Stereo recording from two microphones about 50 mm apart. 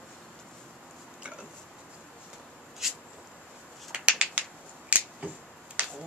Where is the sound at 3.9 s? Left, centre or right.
Right.